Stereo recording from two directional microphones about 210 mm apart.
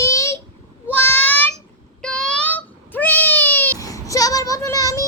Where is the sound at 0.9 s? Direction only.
10° left (ahead or behind).